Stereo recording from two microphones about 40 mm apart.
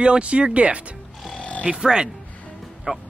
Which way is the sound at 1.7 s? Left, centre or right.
Centre.